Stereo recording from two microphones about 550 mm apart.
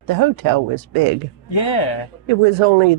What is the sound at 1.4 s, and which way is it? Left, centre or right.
Speech, left.